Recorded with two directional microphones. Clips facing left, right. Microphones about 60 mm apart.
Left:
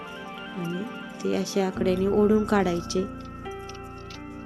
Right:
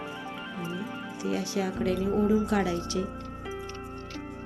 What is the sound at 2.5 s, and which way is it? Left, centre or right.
Speech, left.